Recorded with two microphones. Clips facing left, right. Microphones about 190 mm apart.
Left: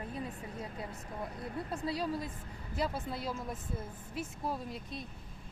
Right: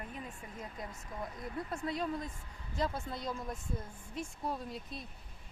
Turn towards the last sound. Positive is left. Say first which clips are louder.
# left 1 dB
turn(degrees=0)  # may be behind; listen again after turning